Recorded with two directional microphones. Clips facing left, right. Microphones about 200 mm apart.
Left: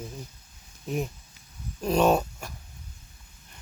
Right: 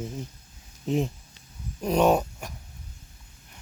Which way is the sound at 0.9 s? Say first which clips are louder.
Right 4 dB; 25° right (ahead or behind).